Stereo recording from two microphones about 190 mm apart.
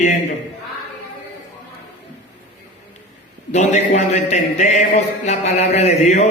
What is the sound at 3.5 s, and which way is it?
A man's voice, 35° left (ahead or behind).